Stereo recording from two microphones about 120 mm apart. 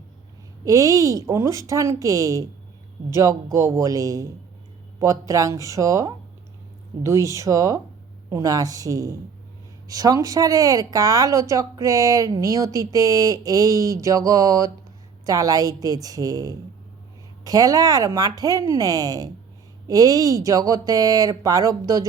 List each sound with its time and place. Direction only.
0.6 s speech: 30° right (ahead or behind)